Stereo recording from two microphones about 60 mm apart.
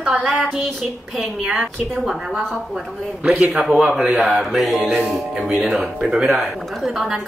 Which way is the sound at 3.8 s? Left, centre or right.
Centre.